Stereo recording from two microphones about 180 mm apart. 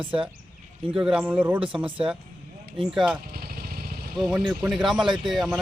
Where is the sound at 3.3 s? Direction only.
60° right (ahead or behind).